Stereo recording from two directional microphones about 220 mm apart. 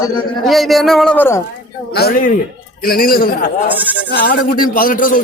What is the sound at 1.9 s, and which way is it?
A man's voice, 45° left (ahead or behind).